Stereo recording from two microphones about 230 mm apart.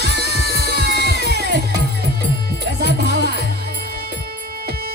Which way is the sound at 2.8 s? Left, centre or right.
Right.